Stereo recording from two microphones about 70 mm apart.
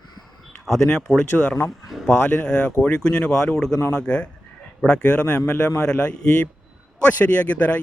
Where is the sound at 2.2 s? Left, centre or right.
Left.